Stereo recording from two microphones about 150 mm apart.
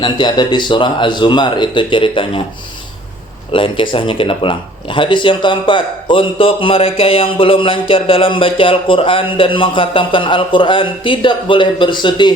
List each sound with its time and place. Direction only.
0.0 s speech: 30° left (ahead or behind)
3.5 s speech: 35° left (ahead or behind)